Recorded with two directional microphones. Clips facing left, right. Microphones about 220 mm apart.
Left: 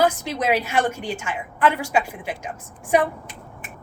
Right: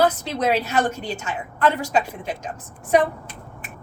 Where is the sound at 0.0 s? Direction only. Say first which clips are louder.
Right 1 dB; 10° left (ahead or behind).